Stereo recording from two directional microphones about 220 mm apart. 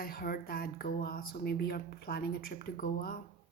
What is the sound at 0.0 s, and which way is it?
A woman's voice, 40° left (ahead or behind).